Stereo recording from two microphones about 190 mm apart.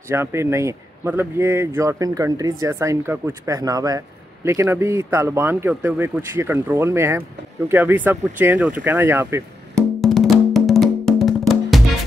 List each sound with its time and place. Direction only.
0.1 s speech: 15° right (ahead or behind)
9.9 s music: centre (ahead or behind)